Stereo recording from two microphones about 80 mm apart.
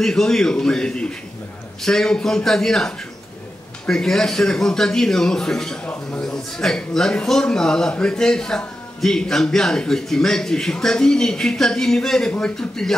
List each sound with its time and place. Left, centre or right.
0.0 s a man's voice: centre